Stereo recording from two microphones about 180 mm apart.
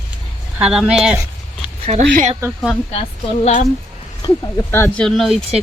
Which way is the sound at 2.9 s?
35° left (ahead or behind).